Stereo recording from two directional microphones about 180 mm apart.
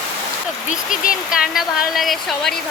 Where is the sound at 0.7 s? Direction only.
50° left (ahead or behind).